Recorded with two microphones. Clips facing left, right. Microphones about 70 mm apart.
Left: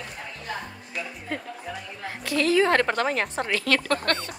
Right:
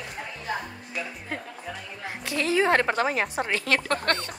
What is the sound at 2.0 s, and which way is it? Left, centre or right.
A woman's voice, centre.